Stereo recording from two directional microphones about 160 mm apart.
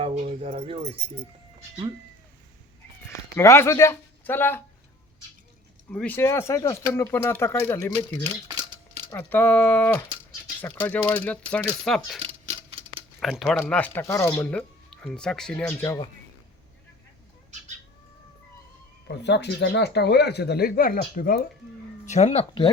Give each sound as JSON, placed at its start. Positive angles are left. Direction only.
{"t": 0.0, "sound": "keys jangling", "side_deg": -40}
{"t": 3.3, "sound": "speech", "side_deg": 15}
{"t": 5.9, "sound": "speech", "side_deg": 10}
{"t": 8.4, "sound": "a sound", "side_deg": -30}
{"t": 9.0, "sound": "speech", "side_deg": 15}
{"t": 19.0, "sound": "speech", "side_deg": 90}
{"t": 22.0, "sound": "speech", "side_deg": 45}